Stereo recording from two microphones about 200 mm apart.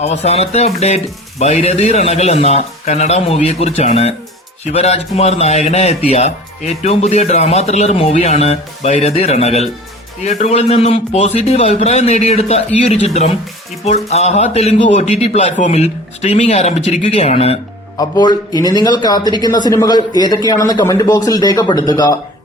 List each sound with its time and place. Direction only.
0.0 s a man's voice: 35° left (ahead or behind)
17.9 s a man's voice: 20° left (ahead or behind)